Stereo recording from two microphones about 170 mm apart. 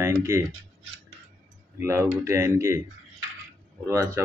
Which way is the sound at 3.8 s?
15° right (ahead or behind).